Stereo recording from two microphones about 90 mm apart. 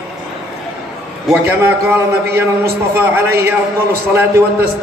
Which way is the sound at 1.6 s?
25° right (ahead or behind).